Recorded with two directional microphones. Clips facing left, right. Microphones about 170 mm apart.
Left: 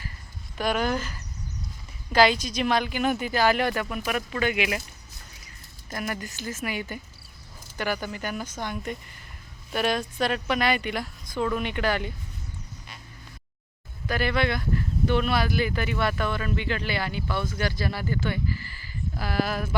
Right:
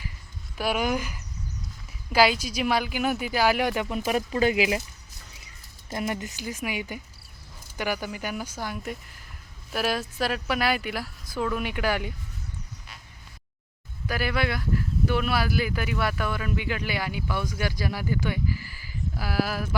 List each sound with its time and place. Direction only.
0.5 s speech: 5° right (ahead or behind)
3.8 s speech: 25° right (ahead or behind)
5.9 s speech: 20° right (ahead or behind)
14.1 s speech: 5° right (ahead or behind)